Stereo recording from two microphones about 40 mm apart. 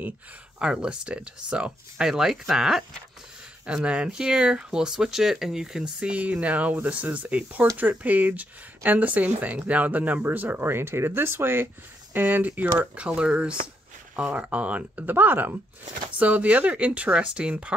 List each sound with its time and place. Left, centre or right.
0.6 s speech: right
2.0 s speech: centre
3.6 s speech: right
5.9 s speech: right
10.6 s speech: right
12.9 s speech: right
15.0 s speech: right
16.1 s speech: right